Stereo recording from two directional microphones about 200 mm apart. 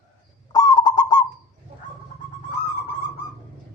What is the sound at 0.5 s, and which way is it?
Goose, 20° left (ahead or behind).